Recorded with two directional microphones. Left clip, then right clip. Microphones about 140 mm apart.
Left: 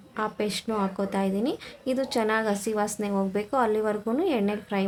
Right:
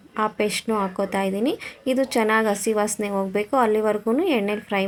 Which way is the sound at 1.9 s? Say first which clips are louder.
Right 5 dB; 25° right (ahead or behind).